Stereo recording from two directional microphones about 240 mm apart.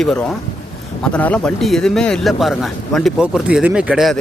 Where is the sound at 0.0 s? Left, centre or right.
Centre.